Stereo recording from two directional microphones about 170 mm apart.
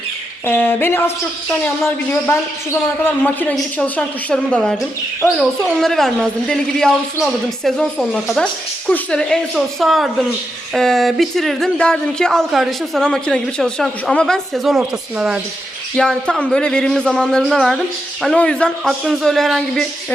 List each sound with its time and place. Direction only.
0.4 s speech: 10° left (ahead or behind)